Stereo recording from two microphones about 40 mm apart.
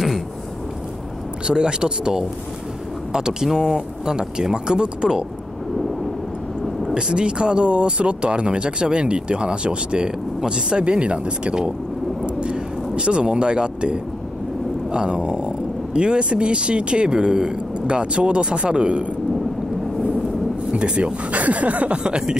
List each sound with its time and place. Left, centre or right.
1.5 s speech: right
6.9 s speech: centre
12.4 s a sound: right
14.9 s speech: right
20.7 s speech: right